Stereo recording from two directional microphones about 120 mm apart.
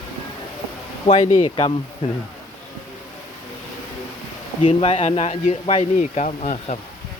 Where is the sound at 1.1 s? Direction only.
75° left (ahead or behind).